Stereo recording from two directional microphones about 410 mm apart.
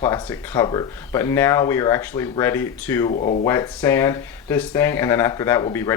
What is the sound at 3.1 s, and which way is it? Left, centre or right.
Speech, centre.